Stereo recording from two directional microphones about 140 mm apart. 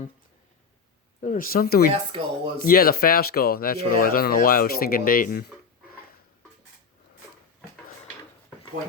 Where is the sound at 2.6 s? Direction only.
90° left.